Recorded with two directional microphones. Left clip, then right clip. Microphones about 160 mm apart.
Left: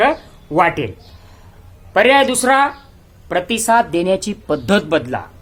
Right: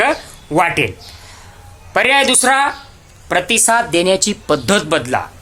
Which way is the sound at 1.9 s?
5° right (ahead or behind).